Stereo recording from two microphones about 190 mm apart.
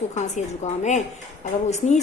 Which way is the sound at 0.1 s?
35° left (ahead or behind).